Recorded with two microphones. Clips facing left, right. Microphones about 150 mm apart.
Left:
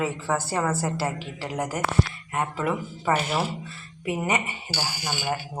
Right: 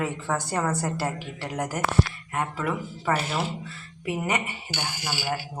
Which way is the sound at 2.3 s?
20° left (ahead or behind).